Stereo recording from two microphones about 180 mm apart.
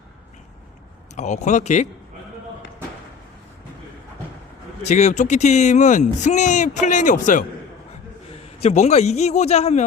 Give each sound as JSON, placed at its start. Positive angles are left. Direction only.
{"t": 1.1, "sound": "speech", "side_deg": 40}
{"t": 4.8, "sound": "speech", "side_deg": 40}
{"t": 8.6, "sound": "speech", "side_deg": 40}